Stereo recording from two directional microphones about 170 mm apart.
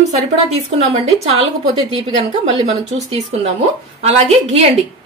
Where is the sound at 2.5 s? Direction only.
35° right (ahead or behind).